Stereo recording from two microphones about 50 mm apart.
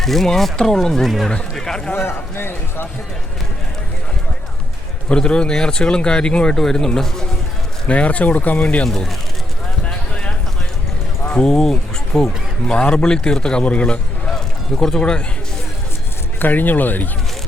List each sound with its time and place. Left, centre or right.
0.0 s speech: centre
2.0 s a man's voice: left
5.0 s speech: centre
7.9 s speech: left
8.8 s speech: centre
9.8 s clip-clop: left
11.3 s speech: left
14.3 s a sound: centre
16.4 s speech: left